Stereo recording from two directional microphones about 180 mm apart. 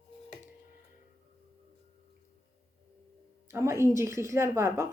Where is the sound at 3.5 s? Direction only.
15° right (ahead or behind).